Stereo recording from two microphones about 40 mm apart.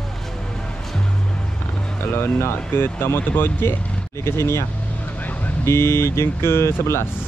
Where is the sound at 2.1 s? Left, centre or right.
Left.